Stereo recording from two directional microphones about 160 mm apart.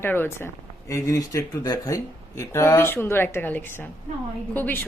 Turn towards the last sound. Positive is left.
turn(degrees=10)  # may be behind; listen again after turning